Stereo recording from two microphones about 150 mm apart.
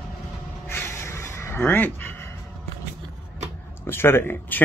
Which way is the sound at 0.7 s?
15° left (ahead or behind).